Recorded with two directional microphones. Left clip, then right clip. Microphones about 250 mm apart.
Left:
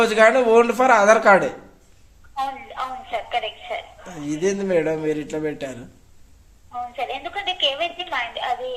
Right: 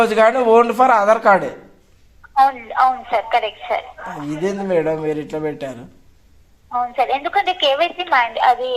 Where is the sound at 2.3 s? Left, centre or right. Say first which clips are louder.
Right 12 dB; right.